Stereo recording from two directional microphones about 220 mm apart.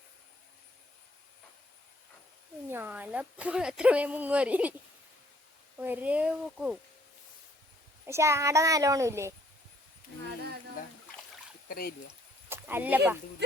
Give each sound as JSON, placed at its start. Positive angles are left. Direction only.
{"t": 2.6, "sound": "speech", "side_deg": -10}
{"t": 5.7, "sound": "speech", "side_deg": -10}
{"t": 8.0, "sound": "speech", "side_deg": -10}
{"t": 11.7, "sound": "speech", "side_deg": 45}
{"t": 12.5, "sound": "speech", "side_deg": -10}